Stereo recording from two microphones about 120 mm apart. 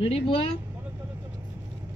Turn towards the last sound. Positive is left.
turn(degrees=55)  # may be behind; listen again after turning